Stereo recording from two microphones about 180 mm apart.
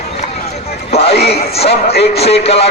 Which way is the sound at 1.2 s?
65° left (ahead or behind).